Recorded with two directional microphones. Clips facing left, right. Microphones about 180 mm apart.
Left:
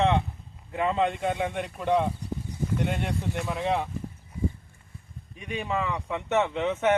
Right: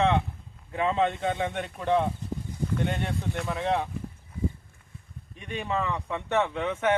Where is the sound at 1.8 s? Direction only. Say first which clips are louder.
Even; 15° left (ahead or behind).